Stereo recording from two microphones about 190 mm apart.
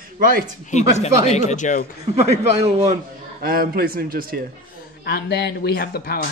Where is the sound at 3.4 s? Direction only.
50° right (ahead or behind).